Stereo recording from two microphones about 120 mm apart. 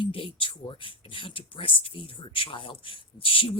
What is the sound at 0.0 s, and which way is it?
A woman's voice, 45° left (ahead or behind).